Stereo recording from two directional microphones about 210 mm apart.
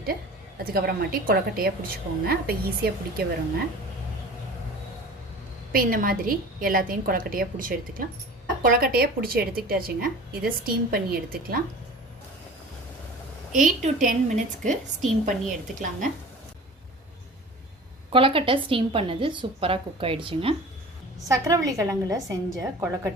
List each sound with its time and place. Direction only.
0.6 s a woman's voice: 45° right (ahead or behind)
5.7 s a woman's voice: 40° right (ahead or behind)
13.5 s a woman's voice: 35° right (ahead or behind)
18.1 s a woman's voice: 25° right (ahead or behind)